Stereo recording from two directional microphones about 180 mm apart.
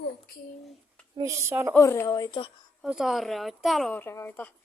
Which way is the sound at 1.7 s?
15° left (ahead or behind).